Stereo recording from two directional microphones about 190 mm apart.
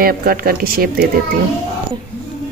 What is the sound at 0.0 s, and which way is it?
Speech, 50° right (ahead or behind).